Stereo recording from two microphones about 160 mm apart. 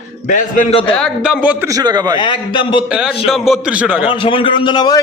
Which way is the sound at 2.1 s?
30° left (ahead or behind).